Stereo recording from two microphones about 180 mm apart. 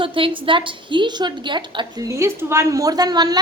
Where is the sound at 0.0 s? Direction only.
30° right (ahead or behind).